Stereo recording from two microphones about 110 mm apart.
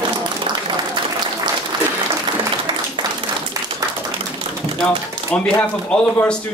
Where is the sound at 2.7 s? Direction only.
45° right (ahead or behind).